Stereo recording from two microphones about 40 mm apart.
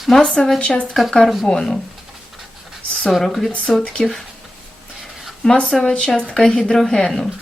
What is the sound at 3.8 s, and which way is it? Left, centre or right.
Speech, left.